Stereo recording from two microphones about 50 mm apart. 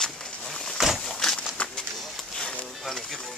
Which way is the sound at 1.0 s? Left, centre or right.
Centre.